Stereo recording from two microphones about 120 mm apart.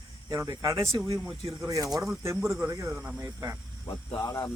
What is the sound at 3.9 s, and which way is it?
Speech, 30° left (ahead or behind).